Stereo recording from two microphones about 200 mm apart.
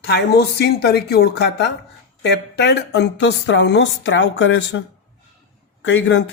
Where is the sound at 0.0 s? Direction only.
55° left (ahead or behind).